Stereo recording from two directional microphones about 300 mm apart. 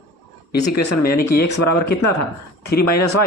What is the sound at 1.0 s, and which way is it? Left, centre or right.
Speech, left.